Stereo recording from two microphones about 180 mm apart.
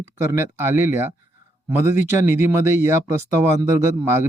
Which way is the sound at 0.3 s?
15° right (ahead or behind).